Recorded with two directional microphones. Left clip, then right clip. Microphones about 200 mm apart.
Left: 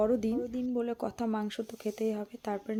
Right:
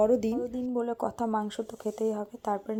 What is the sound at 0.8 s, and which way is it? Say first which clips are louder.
Speech: right 5 dB; 20° left (ahead or behind).